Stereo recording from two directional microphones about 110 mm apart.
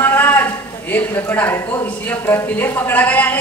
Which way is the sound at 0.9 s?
15° left (ahead or behind).